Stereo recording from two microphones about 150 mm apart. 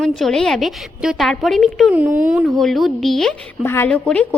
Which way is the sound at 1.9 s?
10° right (ahead or behind).